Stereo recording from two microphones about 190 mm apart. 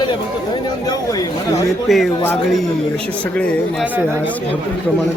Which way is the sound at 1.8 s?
Centre (ahead or behind).